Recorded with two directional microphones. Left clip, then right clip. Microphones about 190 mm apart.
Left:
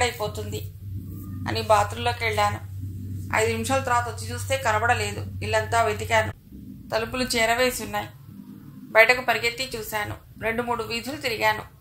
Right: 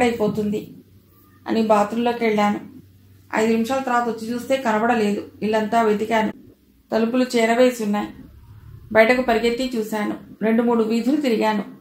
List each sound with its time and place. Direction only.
0.0 s a woman's voice: 30° left (ahead or behind)